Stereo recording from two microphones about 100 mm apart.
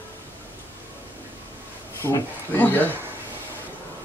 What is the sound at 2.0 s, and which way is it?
Speech, 20° left (ahead or behind).